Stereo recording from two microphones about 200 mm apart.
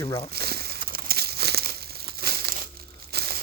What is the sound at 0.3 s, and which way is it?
Crumpling, 50° right (ahead or behind).